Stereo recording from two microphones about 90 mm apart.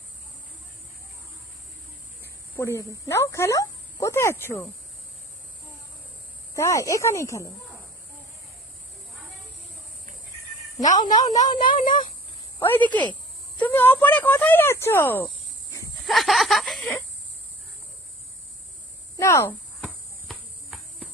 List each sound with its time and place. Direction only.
2.2 s speech: 30° left (ahead or behind)
6.6 s speech: 35° left (ahead or behind)
10.8 s speech: 50° left (ahead or behind)
12.5 s speech: 25° left (ahead or behind)
16.0 s snicker: centre (ahead or behind)
19.1 s speech: 35° left (ahead or behind)